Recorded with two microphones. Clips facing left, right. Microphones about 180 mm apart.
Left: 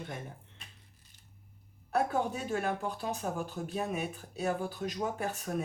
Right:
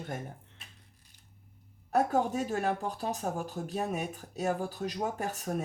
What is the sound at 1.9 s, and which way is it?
A woman's voice, 40° right (ahead or behind).